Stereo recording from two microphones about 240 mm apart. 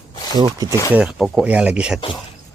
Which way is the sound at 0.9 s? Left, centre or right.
Centre.